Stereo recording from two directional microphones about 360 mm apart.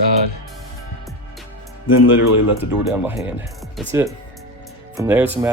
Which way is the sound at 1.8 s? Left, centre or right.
Left.